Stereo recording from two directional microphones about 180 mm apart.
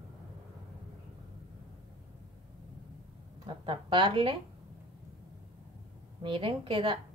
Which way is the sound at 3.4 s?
30° right (ahead or behind).